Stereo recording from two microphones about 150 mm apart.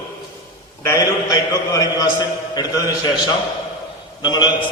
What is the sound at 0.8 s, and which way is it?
A man's voice, 25° left (ahead or behind).